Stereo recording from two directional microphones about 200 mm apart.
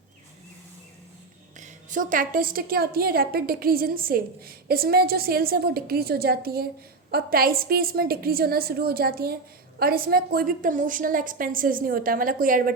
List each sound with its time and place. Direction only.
1.5 s a woman's voice: 40° right (ahead or behind)